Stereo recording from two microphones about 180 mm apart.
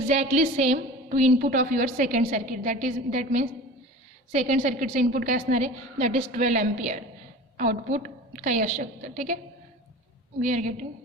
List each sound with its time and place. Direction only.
0.1 s a woman's voice: 40° right (ahead or behind)
10.4 s a woman's voice: 40° right (ahead or behind)